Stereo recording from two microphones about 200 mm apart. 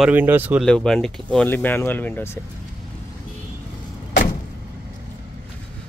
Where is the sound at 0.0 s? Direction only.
10° right (ahead or behind).